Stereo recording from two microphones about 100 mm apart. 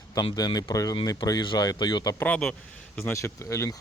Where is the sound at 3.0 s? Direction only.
20° left (ahead or behind).